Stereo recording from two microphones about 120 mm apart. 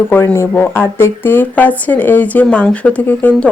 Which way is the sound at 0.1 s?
20° left (ahead or behind).